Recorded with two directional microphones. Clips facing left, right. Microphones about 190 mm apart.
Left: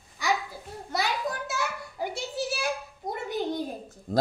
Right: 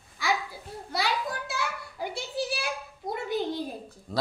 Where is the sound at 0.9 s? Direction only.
45° left (ahead or behind).